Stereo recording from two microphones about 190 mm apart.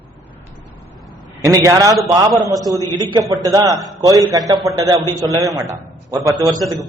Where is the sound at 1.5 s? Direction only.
15° right (ahead or behind).